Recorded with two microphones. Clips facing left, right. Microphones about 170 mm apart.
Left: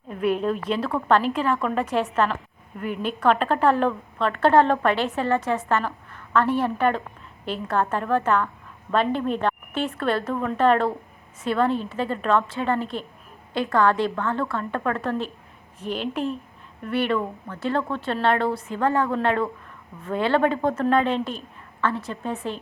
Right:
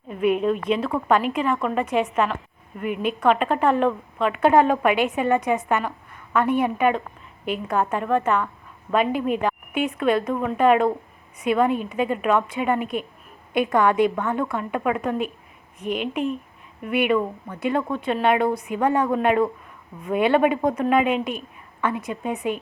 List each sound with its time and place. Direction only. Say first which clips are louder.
0.1 s a woman's voice: right 2 dB; centre (ahead or behind)
16.8 s a woman's voice: right 3 dB; 10° right (ahead or behind)